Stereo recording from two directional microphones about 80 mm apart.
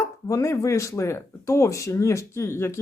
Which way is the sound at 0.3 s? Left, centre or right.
Left.